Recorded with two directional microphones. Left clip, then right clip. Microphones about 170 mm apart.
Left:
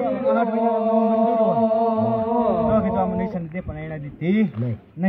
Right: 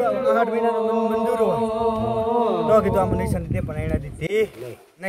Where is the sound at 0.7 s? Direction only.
25° right (ahead or behind).